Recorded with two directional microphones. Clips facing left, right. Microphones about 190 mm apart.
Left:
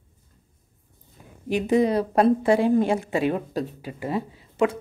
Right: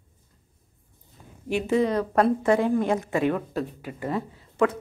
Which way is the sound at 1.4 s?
15° left (ahead or behind).